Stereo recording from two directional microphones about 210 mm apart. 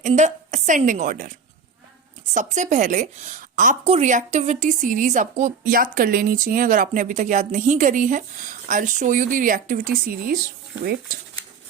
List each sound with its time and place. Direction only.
0.0 s a woman's voice: 35° right (ahead or behind)
2.3 s a woman's voice: 35° right (ahead or behind)